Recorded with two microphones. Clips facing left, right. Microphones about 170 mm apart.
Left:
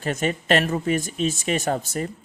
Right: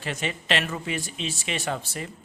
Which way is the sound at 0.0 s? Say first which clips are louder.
Left 7 dB; 45° left (ahead or behind).